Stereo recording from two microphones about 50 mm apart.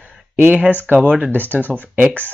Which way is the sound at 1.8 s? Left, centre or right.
Right.